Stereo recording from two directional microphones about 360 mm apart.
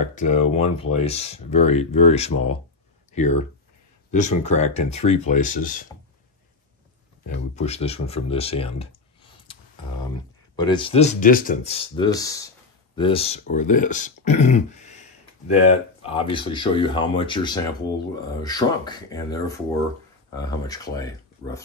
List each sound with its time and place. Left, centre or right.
0.0 s speech: centre
4.1 s speech: centre
7.2 s speech: centre
10.5 s speech: centre
16.0 s speech: centre